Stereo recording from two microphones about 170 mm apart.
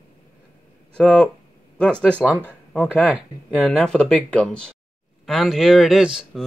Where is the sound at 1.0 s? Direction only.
5° left (ahead or behind).